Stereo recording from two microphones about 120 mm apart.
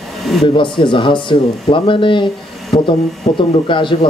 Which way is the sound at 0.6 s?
45° left (ahead or behind).